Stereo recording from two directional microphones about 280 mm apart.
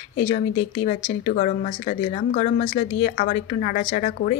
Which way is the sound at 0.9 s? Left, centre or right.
Left.